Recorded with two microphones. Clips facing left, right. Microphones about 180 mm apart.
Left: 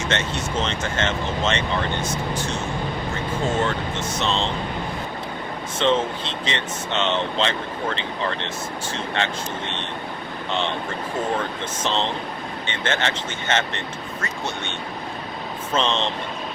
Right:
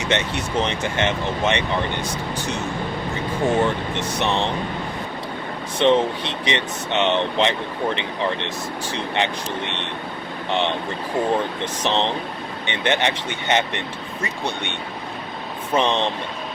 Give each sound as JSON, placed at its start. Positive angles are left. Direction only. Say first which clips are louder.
{"t": 0.0, "sound": "speech", "louder": "right 2 dB", "side_deg": -15}
{"t": 3.4, "sound": "speech", "louder": "right 4 dB", "side_deg": -15}
{"t": 5.8, "sound": "speech", "louder": "right 4 dB", "side_deg": -15}
{"t": 11.3, "sound": "speech", "louder": "right 3 dB", "side_deg": -15}
{"t": 15.7, "sound": "speech", "louder": "right 3 dB", "side_deg": -15}